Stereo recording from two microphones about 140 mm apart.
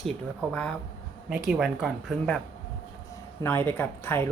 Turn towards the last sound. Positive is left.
turn(degrees=15)  # may be behind; listen again after turning